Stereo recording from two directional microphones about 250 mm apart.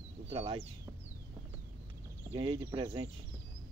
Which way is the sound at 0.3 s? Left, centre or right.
Right.